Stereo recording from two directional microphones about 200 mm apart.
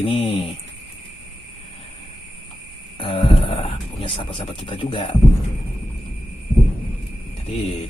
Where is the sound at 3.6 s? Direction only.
25° left (ahead or behind).